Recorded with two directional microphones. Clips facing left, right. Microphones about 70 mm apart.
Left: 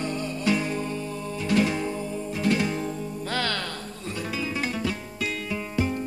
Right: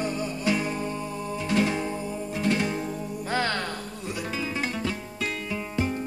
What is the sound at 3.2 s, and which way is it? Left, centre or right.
Music, right.